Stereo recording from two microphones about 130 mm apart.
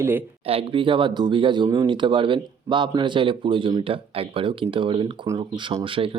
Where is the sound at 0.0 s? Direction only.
15° right (ahead or behind).